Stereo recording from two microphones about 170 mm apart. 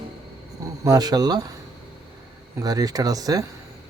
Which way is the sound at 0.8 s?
20° right (ahead or behind).